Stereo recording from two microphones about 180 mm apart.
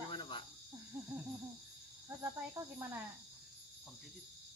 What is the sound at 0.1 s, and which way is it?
Cricket, 25° left (ahead or behind).